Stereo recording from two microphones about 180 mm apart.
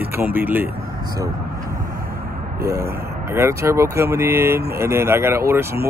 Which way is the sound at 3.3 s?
15° right (ahead or behind).